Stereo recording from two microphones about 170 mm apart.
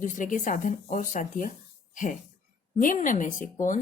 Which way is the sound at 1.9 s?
50° left (ahead or behind).